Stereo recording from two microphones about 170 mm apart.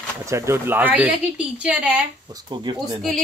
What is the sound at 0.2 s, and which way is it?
A child's voice, 15° right (ahead or behind).